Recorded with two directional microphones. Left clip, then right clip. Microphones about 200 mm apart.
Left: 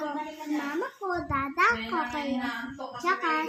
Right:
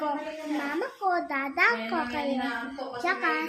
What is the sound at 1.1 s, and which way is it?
A woman's voice, 10° right (ahead or behind).